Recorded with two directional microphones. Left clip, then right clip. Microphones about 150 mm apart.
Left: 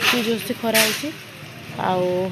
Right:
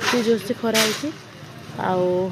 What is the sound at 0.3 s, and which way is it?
Speech, 20° right (ahead or behind).